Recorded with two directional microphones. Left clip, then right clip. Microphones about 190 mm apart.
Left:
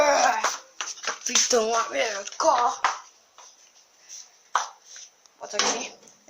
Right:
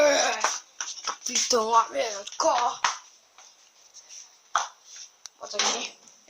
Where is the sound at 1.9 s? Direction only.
Centre (ahead or behind).